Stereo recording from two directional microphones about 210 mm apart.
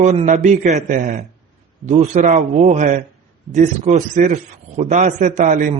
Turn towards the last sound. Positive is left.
turn(degrees=-35)  # may be behind; listen again after turning